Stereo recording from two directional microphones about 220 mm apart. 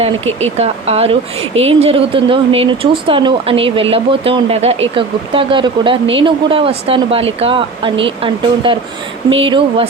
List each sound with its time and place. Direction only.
0.6 s speech: 30° right (ahead or behind)